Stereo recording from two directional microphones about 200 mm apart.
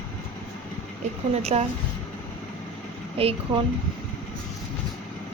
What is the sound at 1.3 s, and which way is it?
Speech, 30° right (ahead or behind).